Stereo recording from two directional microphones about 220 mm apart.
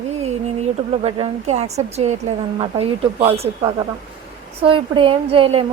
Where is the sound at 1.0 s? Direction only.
30° right (ahead or behind).